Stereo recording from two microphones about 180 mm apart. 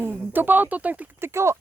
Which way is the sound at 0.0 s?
10° right (ahead or behind).